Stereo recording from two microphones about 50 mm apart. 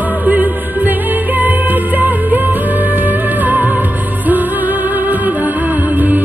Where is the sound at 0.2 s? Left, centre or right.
Right.